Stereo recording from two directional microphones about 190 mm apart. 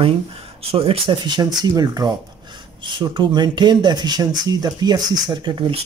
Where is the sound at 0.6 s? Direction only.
30° right (ahead or behind).